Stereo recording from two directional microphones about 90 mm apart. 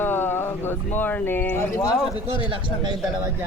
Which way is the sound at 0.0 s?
25° left (ahead or behind).